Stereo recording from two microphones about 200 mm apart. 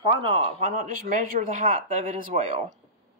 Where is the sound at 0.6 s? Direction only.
40° right (ahead or behind).